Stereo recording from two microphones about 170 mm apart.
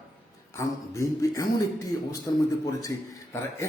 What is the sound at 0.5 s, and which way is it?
Speech, 15° left (ahead or behind).